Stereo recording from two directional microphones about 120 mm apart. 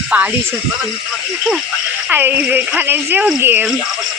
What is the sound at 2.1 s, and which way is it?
Speech, 15° right (ahead or behind).